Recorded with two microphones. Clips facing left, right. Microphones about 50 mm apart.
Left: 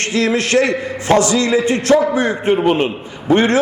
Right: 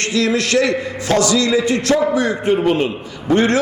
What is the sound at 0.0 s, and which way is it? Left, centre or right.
A man's voice, left.